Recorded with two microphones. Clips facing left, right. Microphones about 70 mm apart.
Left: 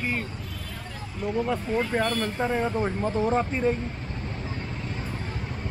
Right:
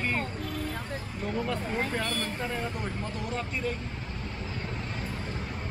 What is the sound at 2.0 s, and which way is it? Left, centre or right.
Speech, left.